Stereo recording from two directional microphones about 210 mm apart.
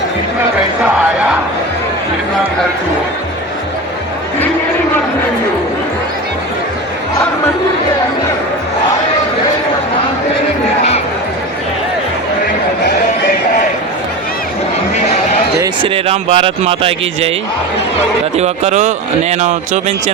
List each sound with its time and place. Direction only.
15.6 s speech: 25° right (ahead or behind)
18.3 s speech: 30° right (ahead or behind)